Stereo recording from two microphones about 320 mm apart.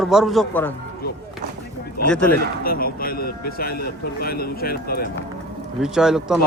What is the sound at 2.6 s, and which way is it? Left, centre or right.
Speech, left.